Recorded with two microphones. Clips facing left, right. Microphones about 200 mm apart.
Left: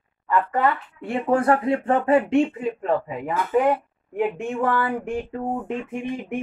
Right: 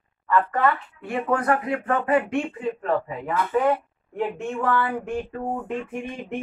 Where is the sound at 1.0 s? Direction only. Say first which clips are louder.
Left 3 dB; 30° left (ahead or behind).